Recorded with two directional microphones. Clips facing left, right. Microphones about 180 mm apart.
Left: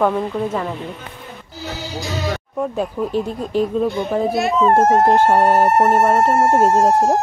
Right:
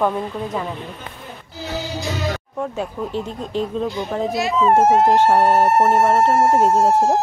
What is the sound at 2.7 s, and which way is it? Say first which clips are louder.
Speech: left 6 dB; 10° left (ahead or behind).